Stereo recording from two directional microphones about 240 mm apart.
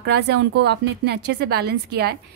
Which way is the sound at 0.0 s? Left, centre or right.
Right.